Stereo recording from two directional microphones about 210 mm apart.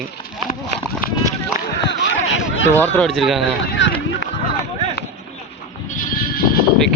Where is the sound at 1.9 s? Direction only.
55° left (ahead or behind).